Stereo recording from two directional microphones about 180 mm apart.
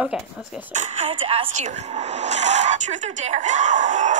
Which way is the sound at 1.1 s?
30° right (ahead or behind).